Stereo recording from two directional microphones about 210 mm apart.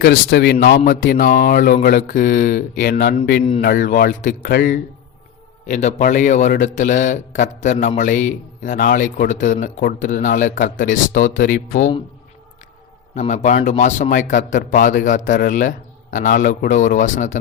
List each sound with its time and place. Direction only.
0.0 s mantra: 50° left (ahead or behind)
5.6 s a man's voice: 35° left (ahead or behind)
13.1 s a man's voice: 35° left (ahead or behind)